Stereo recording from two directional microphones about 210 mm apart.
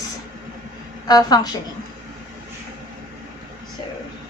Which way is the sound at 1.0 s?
20° left (ahead or behind).